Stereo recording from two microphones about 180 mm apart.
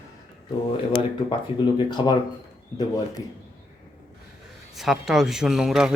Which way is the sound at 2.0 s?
25° left (ahead or behind).